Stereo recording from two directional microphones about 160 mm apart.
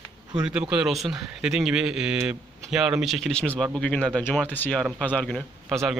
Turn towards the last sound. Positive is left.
turn(degrees=0)  # may be behind; listen again after turning